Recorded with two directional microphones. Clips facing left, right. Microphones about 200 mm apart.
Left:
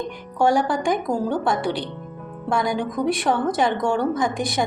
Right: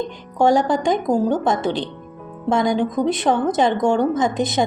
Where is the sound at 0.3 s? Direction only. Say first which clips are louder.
Right 3 dB; 20° right (ahead or behind).